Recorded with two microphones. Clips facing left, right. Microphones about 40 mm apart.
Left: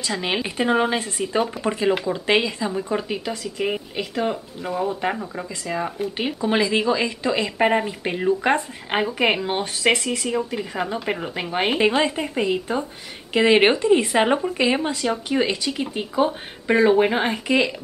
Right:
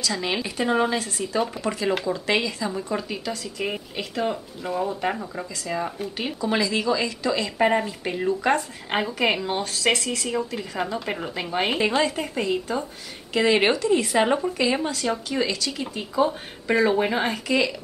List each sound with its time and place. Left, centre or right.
0.0 s speech: left
1.9 s speech: centre
2.1 s speech: left
6.1 s speech: left; by 11.5 s centre
11.5 s speech: left